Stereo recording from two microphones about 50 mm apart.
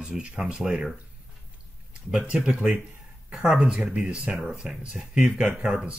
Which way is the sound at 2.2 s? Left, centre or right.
Right.